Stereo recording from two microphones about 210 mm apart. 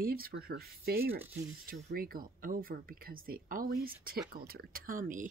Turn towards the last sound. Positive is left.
turn(degrees=-40)  # may be behind; listen again after turning